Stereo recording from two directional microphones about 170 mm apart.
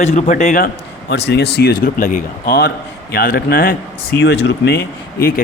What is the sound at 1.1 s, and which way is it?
Speech, 85° left.